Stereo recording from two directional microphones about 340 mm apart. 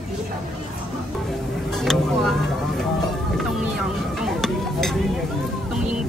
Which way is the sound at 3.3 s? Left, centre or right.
Centre.